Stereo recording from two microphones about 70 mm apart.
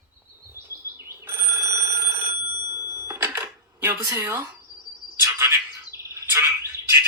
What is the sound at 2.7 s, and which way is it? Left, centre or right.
Bicycle bell, right.